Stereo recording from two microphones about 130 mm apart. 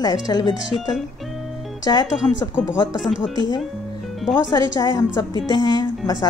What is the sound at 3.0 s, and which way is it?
Speech, centre (ahead or behind).